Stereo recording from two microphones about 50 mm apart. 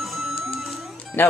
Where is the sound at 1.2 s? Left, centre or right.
Left.